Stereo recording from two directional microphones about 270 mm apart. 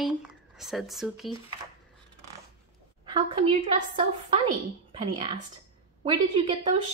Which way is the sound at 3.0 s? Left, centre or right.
Centre.